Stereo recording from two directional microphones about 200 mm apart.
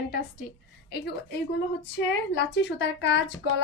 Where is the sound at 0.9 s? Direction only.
55° left (ahead or behind).